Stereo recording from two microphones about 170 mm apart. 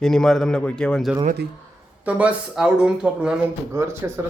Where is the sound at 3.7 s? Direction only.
15° right (ahead or behind).